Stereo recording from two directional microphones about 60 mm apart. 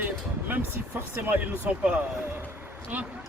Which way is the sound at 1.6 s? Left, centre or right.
Right.